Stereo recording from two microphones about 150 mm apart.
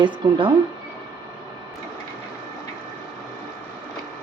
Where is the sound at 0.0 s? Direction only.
35° right (ahead or behind).